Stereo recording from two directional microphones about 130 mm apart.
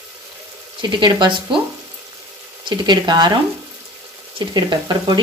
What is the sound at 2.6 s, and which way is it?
Speech, 35° right (ahead or behind).